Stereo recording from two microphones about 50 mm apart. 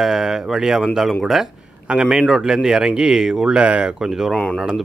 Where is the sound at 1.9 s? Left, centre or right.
Right.